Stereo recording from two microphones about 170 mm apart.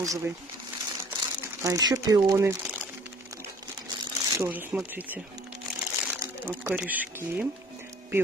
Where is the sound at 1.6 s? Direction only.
20° right (ahead or behind).